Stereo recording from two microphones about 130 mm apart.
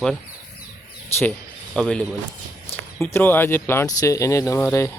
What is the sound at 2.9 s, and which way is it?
Speech, 15° left (ahead or behind).